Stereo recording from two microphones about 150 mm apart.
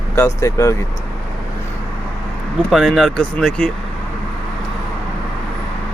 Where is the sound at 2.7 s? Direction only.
Centre (ahead or behind).